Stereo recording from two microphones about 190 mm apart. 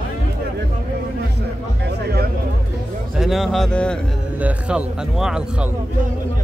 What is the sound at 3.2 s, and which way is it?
Speech, centre (ahead or behind).